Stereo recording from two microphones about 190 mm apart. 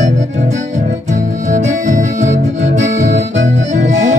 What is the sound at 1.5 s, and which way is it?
Music, 40° right (ahead or behind).